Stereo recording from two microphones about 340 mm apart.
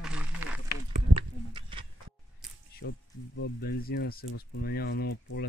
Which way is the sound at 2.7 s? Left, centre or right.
Left.